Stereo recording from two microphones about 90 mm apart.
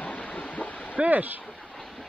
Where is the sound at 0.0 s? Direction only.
15° left (ahead or behind).